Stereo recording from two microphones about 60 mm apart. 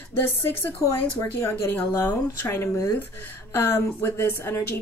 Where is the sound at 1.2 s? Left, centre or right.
Left.